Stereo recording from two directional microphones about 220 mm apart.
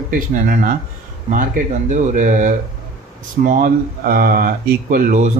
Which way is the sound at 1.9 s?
35° right (ahead or behind).